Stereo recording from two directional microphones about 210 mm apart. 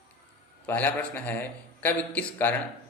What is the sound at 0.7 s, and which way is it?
Speech, 10° left (ahead or behind).